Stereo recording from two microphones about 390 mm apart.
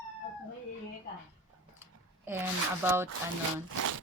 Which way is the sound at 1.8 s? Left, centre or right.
Centre.